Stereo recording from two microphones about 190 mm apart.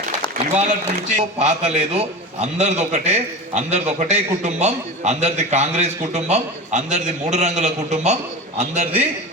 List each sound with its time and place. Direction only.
1.1 s a man's voice: 35° right (ahead or behind)